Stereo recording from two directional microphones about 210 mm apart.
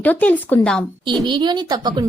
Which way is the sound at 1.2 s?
20° right (ahead or behind).